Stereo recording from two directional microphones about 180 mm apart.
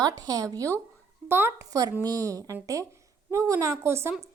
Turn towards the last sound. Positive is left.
turn(degrees=-15)  # may be behind; listen again after turning